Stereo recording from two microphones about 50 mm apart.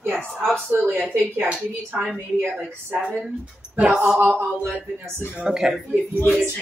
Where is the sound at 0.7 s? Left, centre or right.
Right.